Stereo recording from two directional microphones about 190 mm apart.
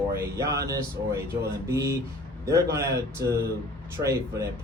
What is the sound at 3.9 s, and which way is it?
Speech, 15° right (ahead or behind).